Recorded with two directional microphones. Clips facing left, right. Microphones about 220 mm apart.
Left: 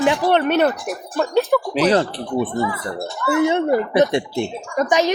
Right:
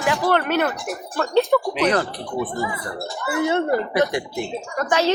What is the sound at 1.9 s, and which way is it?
A woman's voice, 30° left (ahead or behind).